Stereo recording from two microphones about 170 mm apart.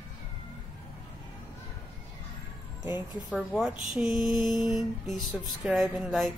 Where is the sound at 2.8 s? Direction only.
10° right (ahead or behind).